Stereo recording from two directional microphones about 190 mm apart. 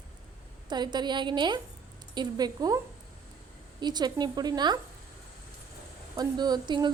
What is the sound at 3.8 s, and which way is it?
A woman's voice, 20° right (ahead or behind).